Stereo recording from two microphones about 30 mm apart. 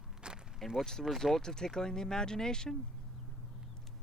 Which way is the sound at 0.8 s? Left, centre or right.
Centre.